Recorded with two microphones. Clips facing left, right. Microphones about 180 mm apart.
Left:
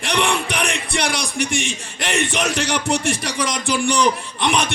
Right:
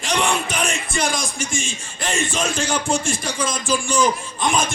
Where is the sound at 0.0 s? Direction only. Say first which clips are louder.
Left 1 dB; 65° left (ahead or behind).